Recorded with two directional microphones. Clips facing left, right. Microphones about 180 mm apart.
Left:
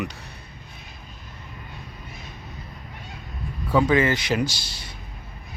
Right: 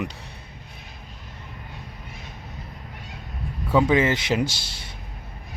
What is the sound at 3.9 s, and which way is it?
Speech, 20° right (ahead or behind).